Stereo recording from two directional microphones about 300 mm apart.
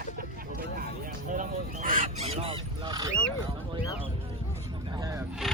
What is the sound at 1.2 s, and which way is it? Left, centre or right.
Speech, right.